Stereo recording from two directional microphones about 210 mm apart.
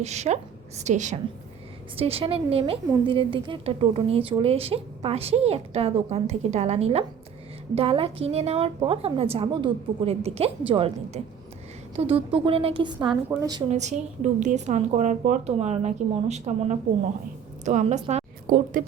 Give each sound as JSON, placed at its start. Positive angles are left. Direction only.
{"t": 0.0, "sound": "a woman's voice", "side_deg": -30}
{"t": 13.2, "sound": "a woman's voice", "side_deg": -10}
{"t": 13.7, "sound": "a woman's voice", "side_deg": -35}
{"t": 17.7, "sound": "a woman's voice", "side_deg": -35}